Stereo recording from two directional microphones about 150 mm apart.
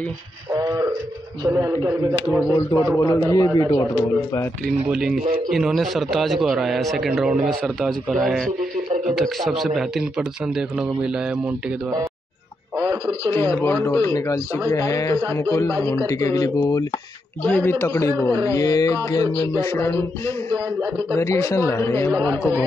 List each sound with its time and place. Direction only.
0.5 s a man's voice: 20° right (ahead or behind)
2.5 s a man's voice: 25° left (ahead or behind)
4.8 s a man's voice: 5° right (ahead or behind)
12.8 s a man's voice: 30° right (ahead or behind)
13.3 s a man's voice: 15° left (ahead or behind)